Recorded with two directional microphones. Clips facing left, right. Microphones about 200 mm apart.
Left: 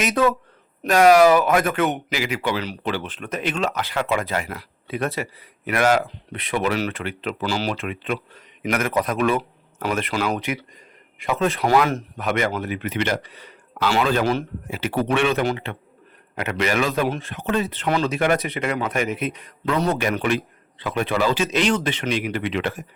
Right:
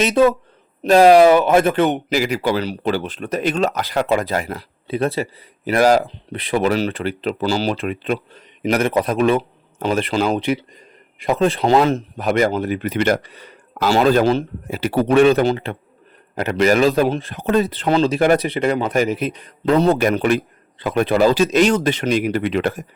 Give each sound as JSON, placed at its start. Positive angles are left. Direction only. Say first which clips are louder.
{"t": 0.0, "sound": "speech", "louder": "right 5 dB", "side_deg": -30}